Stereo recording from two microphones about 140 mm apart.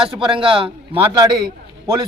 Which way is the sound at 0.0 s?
35° right (ahead or behind).